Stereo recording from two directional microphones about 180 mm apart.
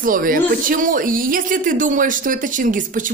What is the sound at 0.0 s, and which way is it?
A woman's voice, 50° right (ahead or behind).